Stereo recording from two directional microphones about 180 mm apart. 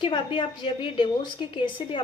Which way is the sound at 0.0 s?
25° left (ahead or behind).